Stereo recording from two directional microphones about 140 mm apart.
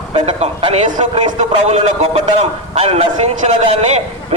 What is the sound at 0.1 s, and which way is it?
A man's voice, 45° right (ahead or behind).